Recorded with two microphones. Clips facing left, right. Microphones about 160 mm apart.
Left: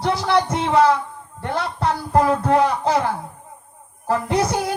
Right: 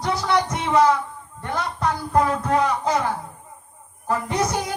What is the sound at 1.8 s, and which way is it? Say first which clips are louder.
Music: left 2 dB; 30° left (ahead or behind).